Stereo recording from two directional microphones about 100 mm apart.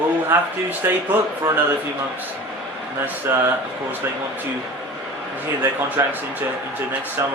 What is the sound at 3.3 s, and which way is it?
Speech, 20° right (ahead or behind).